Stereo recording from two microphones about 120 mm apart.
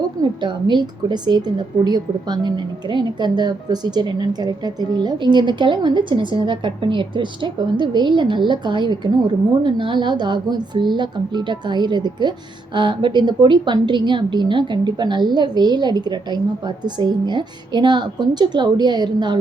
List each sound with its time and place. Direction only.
0.2 s a woman's voice: 40° right (ahead or behind)